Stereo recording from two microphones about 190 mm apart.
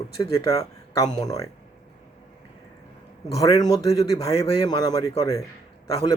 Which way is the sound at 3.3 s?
20° left (ahead or behind).